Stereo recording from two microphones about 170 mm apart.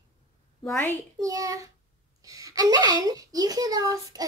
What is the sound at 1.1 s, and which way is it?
A woman's voice, 20° right (ahead or behind).